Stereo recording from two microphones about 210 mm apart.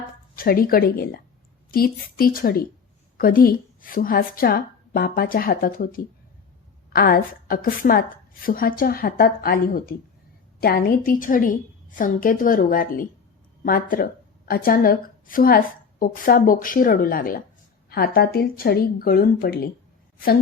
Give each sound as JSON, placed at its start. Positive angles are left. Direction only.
{"t": 0.3, "sound": "a woman's voice", "side_deg": 45}